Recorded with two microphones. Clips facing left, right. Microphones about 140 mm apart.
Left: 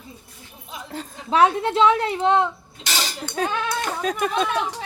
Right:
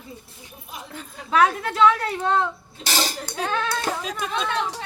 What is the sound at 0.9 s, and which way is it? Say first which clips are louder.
A woman's voice: left 3 dB; 35° left (ahead or behind).